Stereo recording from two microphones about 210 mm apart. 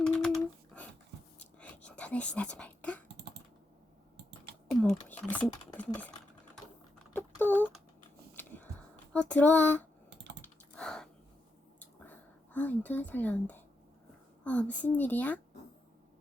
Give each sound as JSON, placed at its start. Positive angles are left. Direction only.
{"t": 0.0, "sound": "a sound", "side_deg": 5}
{"t": 1.5, "sound": "whispering", "side_deg": 5}
{"t": 4.8, "sound": "speech", "side_deg": 5}
{"t": 5.7, "sound": "a sound", "side_deg": 5}
{"t": 7.1, "sound": "typing", "side_deg": 10}
{"t": 8.3, "sound": "a sound", "side_deg": 10}
{"t": 9.1, "sound": "speech", "side_deg": 5}
{"t": 10.1, "sound": "computer keyboard", "side_deg": -55}
{"t": 10.4, "sound": "computer keyboard", "side_deg": 5}
{"t": 12.5, "sound": "speech", "side_deg": 10}